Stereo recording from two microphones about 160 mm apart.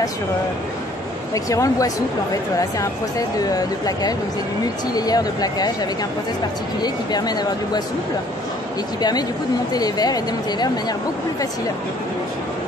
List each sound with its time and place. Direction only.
1.3 s speech: 20° left (ahead or behind)
6.8 s speech: 25° left (ahead or behind)
9.7 s speech: 25° left (ahead or behind)